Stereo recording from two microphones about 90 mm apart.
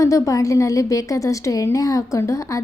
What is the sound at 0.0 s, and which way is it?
A woman's voice, 35° left (ahead or behind).